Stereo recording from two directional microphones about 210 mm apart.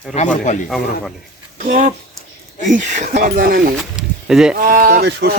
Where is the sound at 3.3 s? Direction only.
45° right (ahead or behind).